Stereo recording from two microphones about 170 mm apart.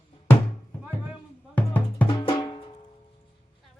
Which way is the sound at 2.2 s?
25° left (ahead or behind).